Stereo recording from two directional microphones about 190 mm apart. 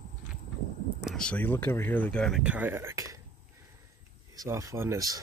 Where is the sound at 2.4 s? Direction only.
10° right (ahead or behind).